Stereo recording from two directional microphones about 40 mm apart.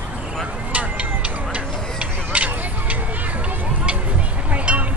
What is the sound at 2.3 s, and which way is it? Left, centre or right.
Vehicle, right.